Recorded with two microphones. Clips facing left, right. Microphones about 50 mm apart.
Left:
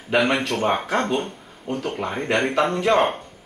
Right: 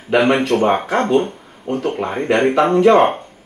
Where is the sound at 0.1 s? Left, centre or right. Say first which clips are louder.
Right 6 dB; right.